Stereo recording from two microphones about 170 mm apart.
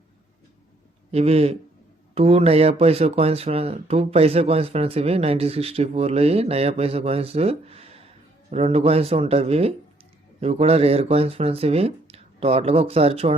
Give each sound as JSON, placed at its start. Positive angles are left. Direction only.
{"t": 1.1, "sound": "speech", "side_deg": -35}